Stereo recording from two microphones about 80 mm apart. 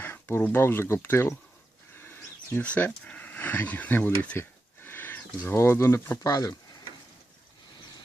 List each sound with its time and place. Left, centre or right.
0.0 s speech: left
2.0 s a sound: left
5.5 s speech: left
6.2 s speech: left